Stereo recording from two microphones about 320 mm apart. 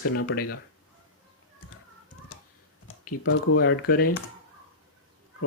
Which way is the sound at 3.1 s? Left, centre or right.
Left.